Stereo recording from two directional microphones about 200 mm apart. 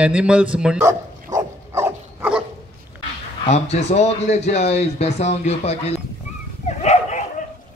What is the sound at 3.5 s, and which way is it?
Speech, 35° left (ahead or behind).